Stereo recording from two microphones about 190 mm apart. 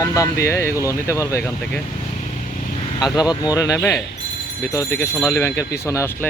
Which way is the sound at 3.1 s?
20° left (ahead or behind).